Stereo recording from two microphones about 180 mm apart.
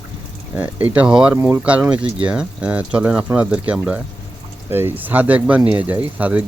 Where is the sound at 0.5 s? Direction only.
10° right (ahead or behind).